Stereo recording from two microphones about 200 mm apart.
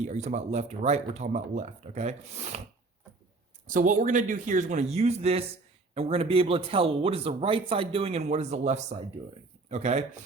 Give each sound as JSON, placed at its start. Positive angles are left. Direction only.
{"t": 0.0, "sound": "speech", "side_deg": -35}
{"t": 3.7, "sound": "speech", "side_deg": -40}